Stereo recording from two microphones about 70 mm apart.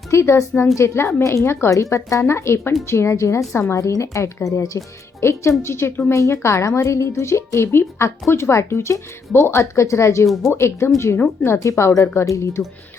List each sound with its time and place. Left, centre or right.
0.1 s a woman's voice: left